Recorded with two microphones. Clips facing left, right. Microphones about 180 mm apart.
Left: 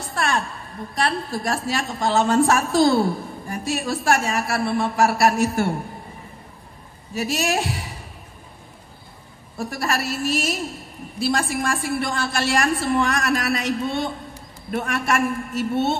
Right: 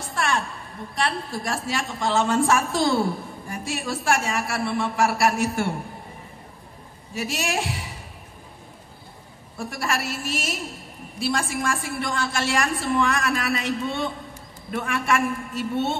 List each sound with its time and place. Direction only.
0.1 s a sound: 40° left (ahead or behind)
0.9 s a woman's voice: 40° left (ahead or behind)
7.2 s a woman's voice: 40° left (ahead or behind)
9.6 s a woman's voice: 40° left (ahead or behind)